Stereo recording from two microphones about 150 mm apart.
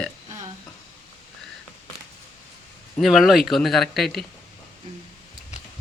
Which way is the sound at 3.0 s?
Centre (ahead or behind).